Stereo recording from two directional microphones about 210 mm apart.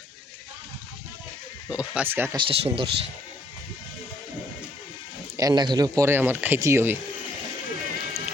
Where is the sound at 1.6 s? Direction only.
5° right (ahead or behind).